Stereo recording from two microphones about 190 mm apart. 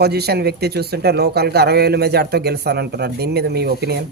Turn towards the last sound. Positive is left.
turn(degrees=-55)  # may be behind; listen again after turning